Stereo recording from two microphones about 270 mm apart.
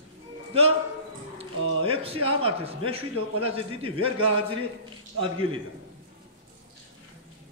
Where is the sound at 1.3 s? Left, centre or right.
Right.